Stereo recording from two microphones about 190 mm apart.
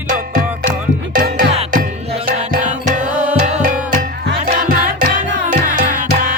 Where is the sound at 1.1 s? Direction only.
45° right (ahead or behind).